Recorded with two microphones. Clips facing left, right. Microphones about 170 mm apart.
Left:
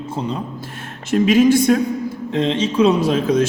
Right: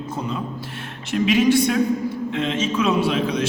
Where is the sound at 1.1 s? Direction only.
45° left (ahead or behind).